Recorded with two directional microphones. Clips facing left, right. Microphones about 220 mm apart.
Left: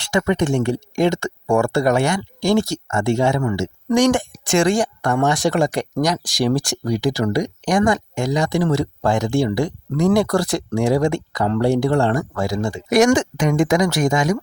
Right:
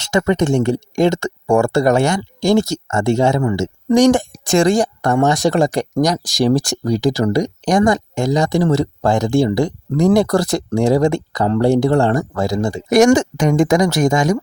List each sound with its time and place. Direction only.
0.0 s speech: 45° right (ahead or behind)